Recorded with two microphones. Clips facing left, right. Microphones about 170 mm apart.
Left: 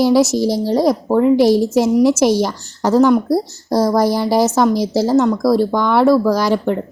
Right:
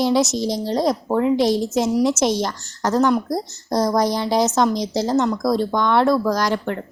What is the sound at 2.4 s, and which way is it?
Speech, 10° left (ahead or behind).